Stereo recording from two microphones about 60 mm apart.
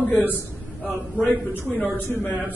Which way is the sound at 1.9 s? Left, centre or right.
Left.